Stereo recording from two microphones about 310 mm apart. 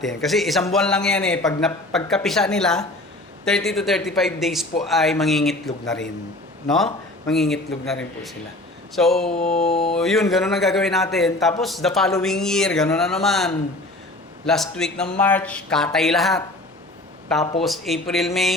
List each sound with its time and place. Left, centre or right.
0.2 s speech: centre
9.4 s mantra: centre
9.9 s speech: centre
17.6 s speech: centre